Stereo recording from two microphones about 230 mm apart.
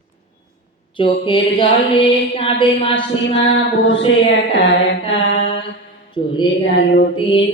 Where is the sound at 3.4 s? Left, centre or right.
Left.